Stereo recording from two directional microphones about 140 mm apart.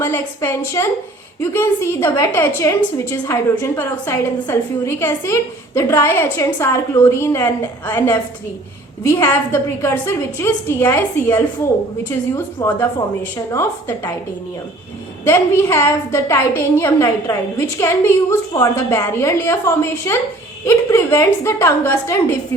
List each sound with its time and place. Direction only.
0.0 s a woman's voice: 15° left (ahead or behind)
12.6 s a woman's voice: 20° left (ahead or behind)
15.2 s a woman's voice: 20° left (ahead or behind)